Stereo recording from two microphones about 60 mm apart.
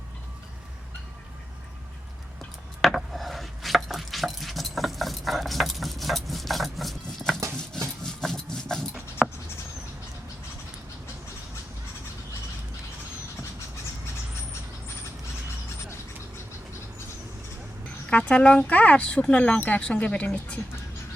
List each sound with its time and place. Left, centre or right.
2.8 s chopping: centre
8.0 s rub: centre
9.2 s a sound: centre
18.1 s speech: centre